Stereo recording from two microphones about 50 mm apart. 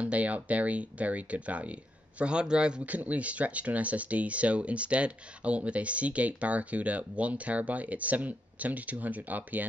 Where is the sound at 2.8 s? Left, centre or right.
Right.